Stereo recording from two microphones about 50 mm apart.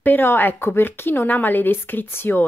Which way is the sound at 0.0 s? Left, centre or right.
Left.